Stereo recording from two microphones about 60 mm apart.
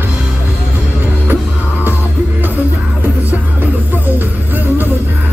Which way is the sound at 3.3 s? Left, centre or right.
Right.